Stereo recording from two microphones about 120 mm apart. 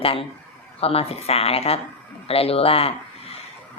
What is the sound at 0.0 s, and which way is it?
Speech, 50° left (ahead or behind).